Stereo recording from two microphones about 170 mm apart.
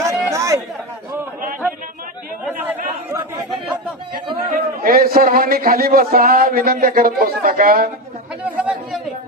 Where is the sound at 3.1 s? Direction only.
25° right (ahead or behind).